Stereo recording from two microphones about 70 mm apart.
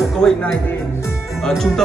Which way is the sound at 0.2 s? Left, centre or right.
Centre.